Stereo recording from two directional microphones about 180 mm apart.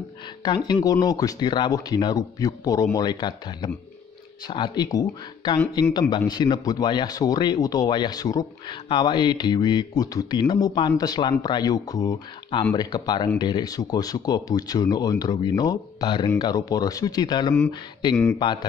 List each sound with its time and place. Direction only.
0.7 s speech: 20° left (ahead or behind)